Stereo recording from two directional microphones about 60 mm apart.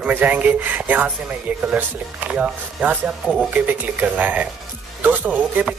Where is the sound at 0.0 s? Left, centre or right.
Right.